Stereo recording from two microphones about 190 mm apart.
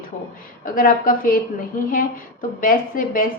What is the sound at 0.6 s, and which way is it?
A woman's voice, 45° left (ahead or behind).